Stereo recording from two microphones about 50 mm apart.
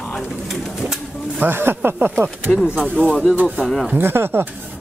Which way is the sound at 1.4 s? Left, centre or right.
Right.